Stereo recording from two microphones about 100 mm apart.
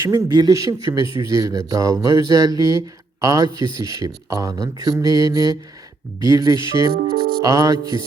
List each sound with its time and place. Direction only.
0.0 s speech: 45° right (ahead or behind)